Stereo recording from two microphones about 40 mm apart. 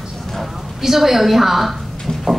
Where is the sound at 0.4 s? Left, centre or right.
Centre.